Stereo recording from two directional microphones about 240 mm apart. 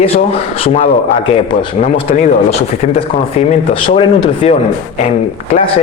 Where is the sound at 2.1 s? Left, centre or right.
Left.